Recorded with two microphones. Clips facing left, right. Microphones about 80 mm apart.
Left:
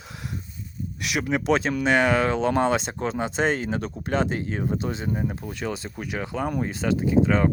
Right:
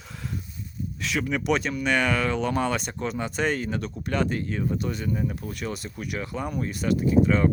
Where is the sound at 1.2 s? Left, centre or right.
Left.